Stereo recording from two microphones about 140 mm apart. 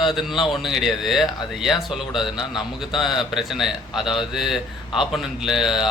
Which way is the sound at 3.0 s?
Centre (ahead or behind).